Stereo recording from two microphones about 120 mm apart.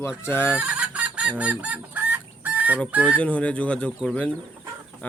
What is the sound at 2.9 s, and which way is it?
Speech, 10° right (ahead or behind).